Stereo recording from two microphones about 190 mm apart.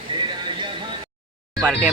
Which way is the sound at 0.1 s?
25° right (ahead or behind).